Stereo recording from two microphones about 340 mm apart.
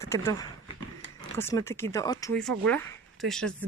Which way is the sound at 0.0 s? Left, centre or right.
Centre.